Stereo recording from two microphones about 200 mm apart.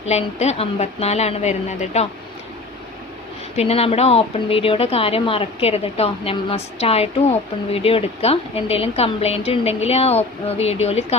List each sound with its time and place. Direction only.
0.1 s a woman's voice: 35° left (ahead or behind)
3.5 s speech: 30° left (ahead or behind)